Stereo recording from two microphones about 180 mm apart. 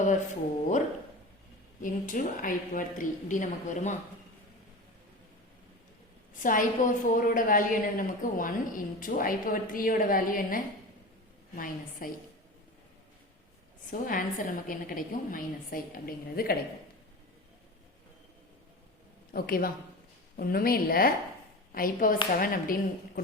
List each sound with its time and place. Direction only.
1.8 s a woman's voice: 50° left (ahead or behind)
6.4 s a woman's voice: 50° left (ahead or behind)
13.9 s a woman's voice: 50° left (ahead or behind)
19.3 s a woman's voice: 55° left (ahead or behind)